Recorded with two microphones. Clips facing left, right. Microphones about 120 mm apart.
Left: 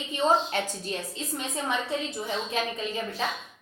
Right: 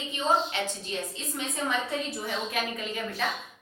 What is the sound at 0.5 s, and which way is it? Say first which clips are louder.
Speech: left 2 dB; 45° left (ahead or behind).